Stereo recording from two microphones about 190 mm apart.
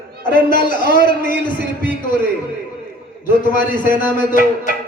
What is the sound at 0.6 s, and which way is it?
Speech, 45° left (ahead or behind).